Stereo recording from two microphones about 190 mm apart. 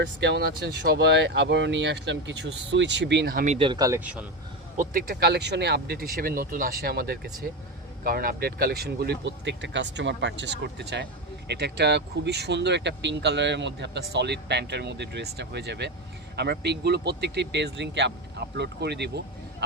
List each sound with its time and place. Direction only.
0.0 s speech: 65° right (ahead or behind); by 3.5 s 50° right (ahead or behind)
3.5 s speech: 25° right (ahead or behind); by 4.2 s 10° right (ahead or behind)
4.8 s speech: 50° right (ahead or behind)